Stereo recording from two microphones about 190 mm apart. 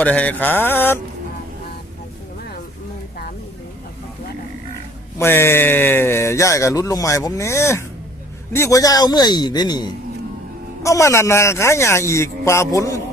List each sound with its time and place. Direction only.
0.0 s speech: 5° left (ahead or behind)
5.1 s a man's voice: 10° left (ahead or behind)